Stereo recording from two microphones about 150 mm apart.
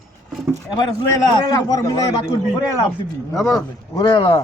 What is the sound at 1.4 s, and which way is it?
A man's voice, 25° left (ahead or behind).